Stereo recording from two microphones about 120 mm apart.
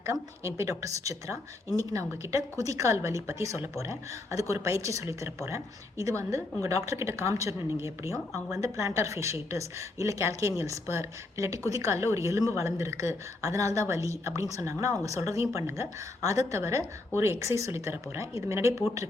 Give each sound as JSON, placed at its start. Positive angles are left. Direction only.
{"t": 0.0, "sound": "a woman's voice", "side_deg": -25}